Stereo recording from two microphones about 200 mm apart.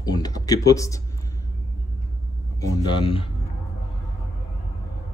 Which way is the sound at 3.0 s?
25° left (ahead or behind).